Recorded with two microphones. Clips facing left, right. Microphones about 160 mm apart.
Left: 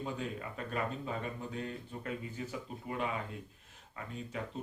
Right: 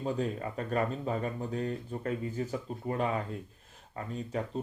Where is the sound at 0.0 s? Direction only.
40° right (ahead or behind).